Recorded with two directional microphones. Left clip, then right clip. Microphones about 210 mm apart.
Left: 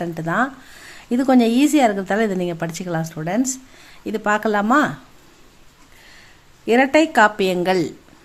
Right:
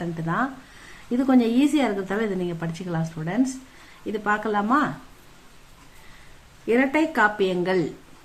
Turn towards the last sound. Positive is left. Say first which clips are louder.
# left 4 dB
turn(degrees=50)  # may be behind; listen again after turning